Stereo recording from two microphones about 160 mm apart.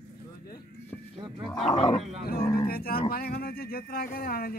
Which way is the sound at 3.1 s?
70° left (ahead or behind).